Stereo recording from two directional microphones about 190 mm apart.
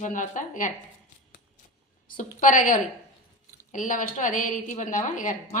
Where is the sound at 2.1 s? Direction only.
45° left (ahead or behind).